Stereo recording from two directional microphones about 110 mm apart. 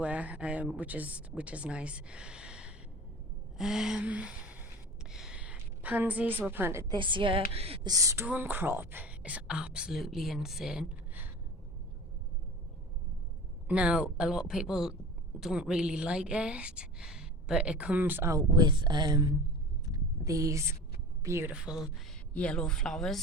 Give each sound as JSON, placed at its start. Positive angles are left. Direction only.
{"t": 0.0, "sound": "speech", "side_deg": -10}
{"t": 3.6, "sound": "a sound", "side_deg": -5}
{"t": 5.1, "sound": "a woman's voice", "side_deg": -5}
{"t": 6.9, "sound": "a woman's voice", "side_deg": -50}
{"t": 7.9, "sound": "speech", "side_deg": -30}
{"t": 13.7, "sound": "speech", "side_deg": -10}
{"t": 18.3, "sound": "speech", "side_deg": -35}
{"t": 19.8, "sound": "a sound", "side_deg": -30}
{"t": 21.2, "sound": "a woman's voice", "side_deg": -25}
{"t": 21.5, "sound": "speech", "side_deg": -5}
{"t": 22.3, "sound": "a woman's voice", "side_deg": 10}